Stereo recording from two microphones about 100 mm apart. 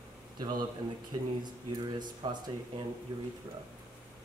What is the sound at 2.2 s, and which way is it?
Speech, 60° right (ahead or behind).